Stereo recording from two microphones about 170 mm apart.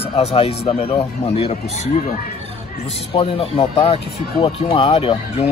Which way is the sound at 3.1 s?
35° left (ahead or behind).